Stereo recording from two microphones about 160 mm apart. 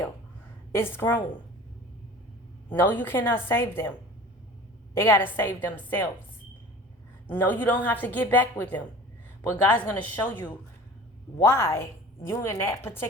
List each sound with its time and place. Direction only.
0.7 s a woman's voice: 15° left (ahead or behind)
2.6 s a woman's voice: 10° left (ahead or behind)
4.9 s a woman's voice: 15° left (ahead or behind)
7.3 s a woman's voice: 10° left (ahead or behind)